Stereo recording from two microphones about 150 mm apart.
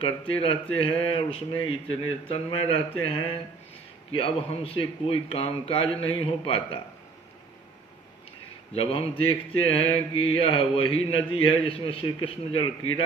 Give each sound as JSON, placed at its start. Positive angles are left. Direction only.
{"t": 0.0, "sound": "speech", "side_deg": 40}
{"t": 8.7, "sound": "speech", "side_deg": 40}